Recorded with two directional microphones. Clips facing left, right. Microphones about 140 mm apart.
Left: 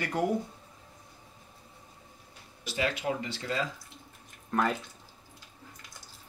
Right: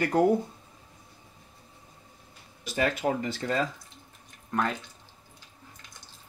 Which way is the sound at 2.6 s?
45° right (ahead or behind).